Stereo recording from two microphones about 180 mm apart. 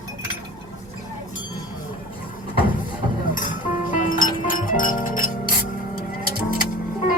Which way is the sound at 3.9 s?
50° left (ahead or behind).